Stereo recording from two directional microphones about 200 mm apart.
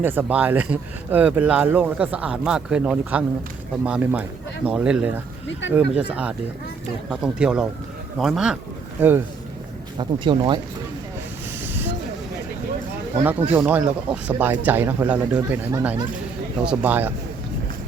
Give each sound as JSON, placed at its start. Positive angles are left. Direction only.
{"t": 0.0, "sound": "speech", "side_deg": -10}
{"t": 10.0, "sound": "speech", "side_deg": -25}
{"t": 11.6, "sound": "train", "side_deg": -10}
{"t": 13.5, "sound": "speech", "side_deg": -10}